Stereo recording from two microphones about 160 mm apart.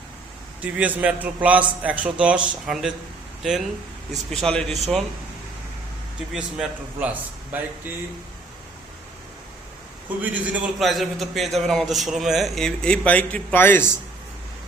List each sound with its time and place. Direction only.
0.6 s a man's voice: 10° right (ahead or behind)
4.3 s a man's voice: 5° left (ahead or behind)
6.3 s a man's voice: 5° right (ahead or behind)
10.2 s a man's voice: 5° right (ahead or behind); by 13.8 s 10° left (ahead or behind)